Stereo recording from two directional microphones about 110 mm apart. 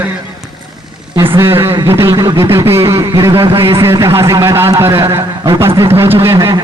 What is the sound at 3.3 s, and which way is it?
Speech, 55° right (ahead or behind).